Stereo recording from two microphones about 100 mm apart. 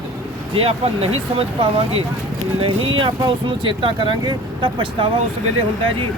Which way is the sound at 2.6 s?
60° right (ahead or behind).